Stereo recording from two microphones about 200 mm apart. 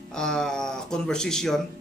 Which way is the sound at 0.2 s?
5° left (ahead or behind).